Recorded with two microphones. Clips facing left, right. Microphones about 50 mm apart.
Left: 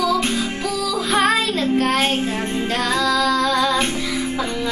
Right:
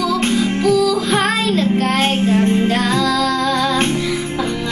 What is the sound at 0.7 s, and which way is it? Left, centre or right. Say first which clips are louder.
Music: right 8 dB; centre.